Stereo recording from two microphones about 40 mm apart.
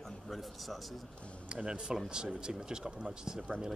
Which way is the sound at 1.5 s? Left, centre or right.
Right.